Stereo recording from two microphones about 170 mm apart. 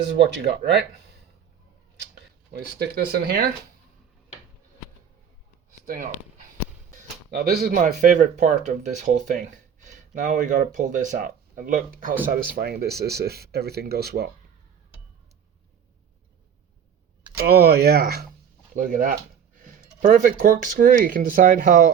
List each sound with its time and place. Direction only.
0.2 s speech: 75° right (ahead or behind)
2.0 s speech: 75° right (ahead or behind)
5.8 s speech: 55° right (ahead or behind)
7.3 s speech: 65° right (ahead or behind)
7.8 s speech: 50° right (ahead or behind); by 14.3 s 65° right (ahead or behind)
17.5 s speech: 65° right (ahead or behind)
18.7 s speech: 50° right (ahead or behind)